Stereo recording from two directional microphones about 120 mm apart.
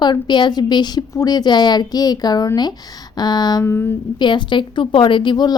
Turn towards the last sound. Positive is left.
turn(degrees=35)  # may be behind; listen again after turning